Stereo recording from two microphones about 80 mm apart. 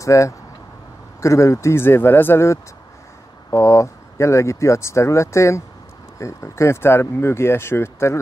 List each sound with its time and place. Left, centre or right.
0.0 s speech: left